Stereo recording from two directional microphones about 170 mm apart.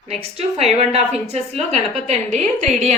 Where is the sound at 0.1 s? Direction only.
40° right (ahead or behind).